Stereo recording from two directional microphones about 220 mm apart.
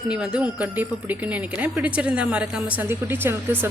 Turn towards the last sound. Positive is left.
turn(degrees=-10)  # may be behind; listen again after turning